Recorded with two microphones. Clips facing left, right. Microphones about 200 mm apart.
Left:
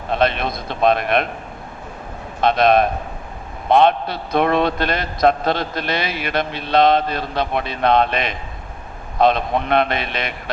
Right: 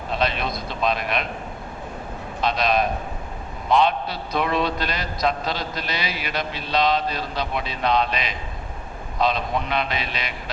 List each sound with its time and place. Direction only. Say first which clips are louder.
0.1 s a man's voice: left 6 dB; 55° left (ahead or behind)
2.4 s a man's voice: left 7 dB; 55° left (ahead or behind)